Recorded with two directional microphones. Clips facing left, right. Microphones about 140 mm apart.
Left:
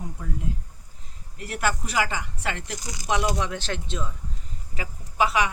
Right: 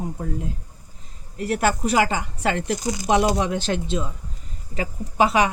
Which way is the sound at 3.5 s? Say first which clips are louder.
Right 7 dB; 15° right (ahead or behind).